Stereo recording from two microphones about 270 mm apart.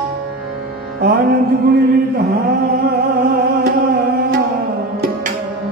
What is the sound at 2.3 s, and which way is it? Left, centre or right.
Music, right.